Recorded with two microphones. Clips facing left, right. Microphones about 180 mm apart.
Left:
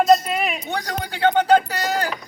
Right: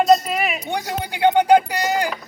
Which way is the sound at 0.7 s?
15° right (ahead or behind).